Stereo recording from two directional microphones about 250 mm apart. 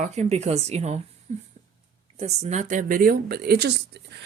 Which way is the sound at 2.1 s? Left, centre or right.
Right.